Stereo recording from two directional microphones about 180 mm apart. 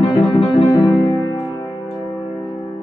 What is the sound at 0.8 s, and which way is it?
Music, 25° left (ahead or behind).